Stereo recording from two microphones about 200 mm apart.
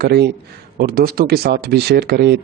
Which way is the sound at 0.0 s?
55° right (ahead or behind).